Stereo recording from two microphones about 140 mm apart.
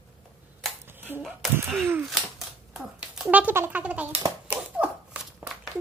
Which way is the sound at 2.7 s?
5° right (ahead or behind).